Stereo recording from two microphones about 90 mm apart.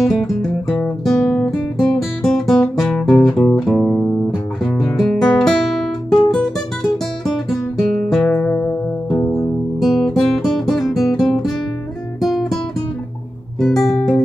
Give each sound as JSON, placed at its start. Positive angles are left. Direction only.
{"t": 0.0, "sound": "music", "side_deg": 5}
{"t": 1.0, "sound": "guitar", "side_deg": 5}
{"t": 3.7, "sound": "music", "side_deg": 15}
{"t": 4.6, "sound": "guitar", "side_deg": 5}
{"t": 8.1, "sound": "music", "side_deg": 15}
{"t": 9.8, "sound": "guitar", "side_deg": 0}
{"t": 12.2, "sound": "music", "side_deg": 0}
{"t": 13.6, "sound": "music", "side_deg": 5}